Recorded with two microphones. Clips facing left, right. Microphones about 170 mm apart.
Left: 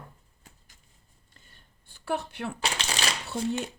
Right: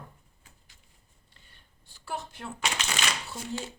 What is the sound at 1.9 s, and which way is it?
Speech, 60° left (ahead or behind).